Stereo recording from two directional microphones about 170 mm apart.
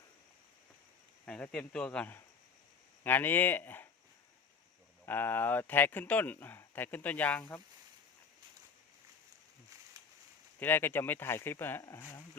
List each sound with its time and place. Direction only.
1.2 s speech: 5° left (ahead or behind)
5.0 s speech: 10° left (ahead or behind)
10.6 s speech: 10° left (ahead or behind)